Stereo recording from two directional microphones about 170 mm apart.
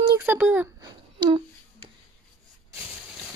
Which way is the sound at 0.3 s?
10° right (ahead or behind).